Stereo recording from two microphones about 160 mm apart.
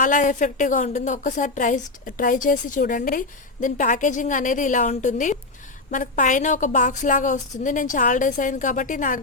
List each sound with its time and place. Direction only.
0.0 s a woman's voice: 55° left (ahead or behind)